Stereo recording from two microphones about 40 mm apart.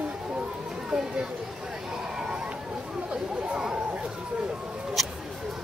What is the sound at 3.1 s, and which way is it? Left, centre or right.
Chatter, right.